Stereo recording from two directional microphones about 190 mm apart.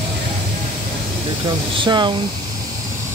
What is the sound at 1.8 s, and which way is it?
Speech, 25° right (ahead or behind).